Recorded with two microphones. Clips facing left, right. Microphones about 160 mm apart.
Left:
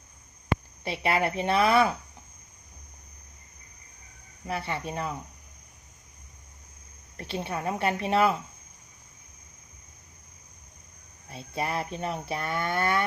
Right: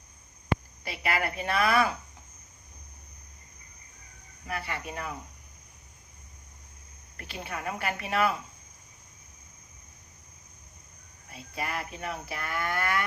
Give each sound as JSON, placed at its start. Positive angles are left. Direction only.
{"t": 0.9, "sound": "speech", "side_deg": 25}
{"t": 4.4, "sound": "speech", "side_deg": 30}
{"t": 7.2, "sound": "speech", "side_deg": 30}
{"t": 11.3, "sound": "speech", "side_deg": 30}